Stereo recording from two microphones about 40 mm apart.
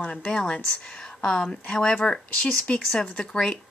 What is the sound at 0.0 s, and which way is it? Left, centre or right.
Speech, left.